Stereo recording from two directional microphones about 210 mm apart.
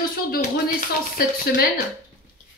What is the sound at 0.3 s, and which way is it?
A woman's voice, 45° left (ahead or behind).